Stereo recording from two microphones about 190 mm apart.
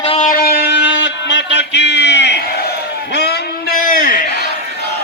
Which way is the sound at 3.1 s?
60° left (ahead or behind).